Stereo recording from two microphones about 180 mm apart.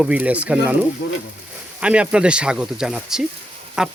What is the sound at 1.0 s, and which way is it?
Speech, 65° left (ahead or behind).